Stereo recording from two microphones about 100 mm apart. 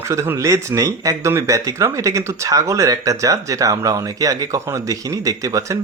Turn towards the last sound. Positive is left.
turn(degrees=-30)  # may be behind; listen again after turning